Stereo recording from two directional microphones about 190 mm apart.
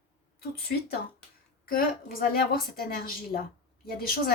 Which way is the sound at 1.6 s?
50° left (ahead or behind).